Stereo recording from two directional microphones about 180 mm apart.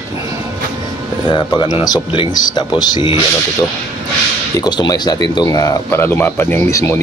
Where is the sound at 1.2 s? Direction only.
25° left (ahead or behind).